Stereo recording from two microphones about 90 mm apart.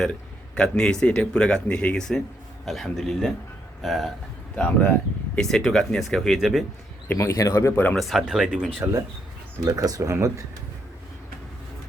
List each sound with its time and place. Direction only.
0.0 s a man's voice: 10° left (ahead or behind)
4.5 s speech: 20° left (ahead or behind)
5.4 s speech: 5° left (ahead or behind)
7.2 s speech: 35° left (ahead or behind)
7.9 s speech: centre (ahead or behind)
9.6 s speech: 40° right (ahead or behind)